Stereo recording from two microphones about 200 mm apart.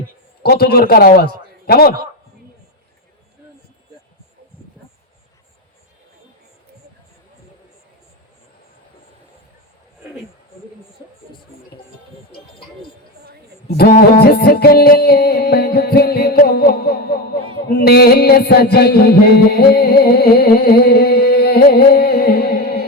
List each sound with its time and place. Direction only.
0.4 s music: 50° left (ahead or behind)
13.7 s music: 50° left (ahead or behind)